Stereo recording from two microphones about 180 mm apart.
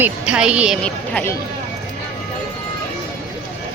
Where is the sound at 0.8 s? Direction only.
10° left (ahead or behind).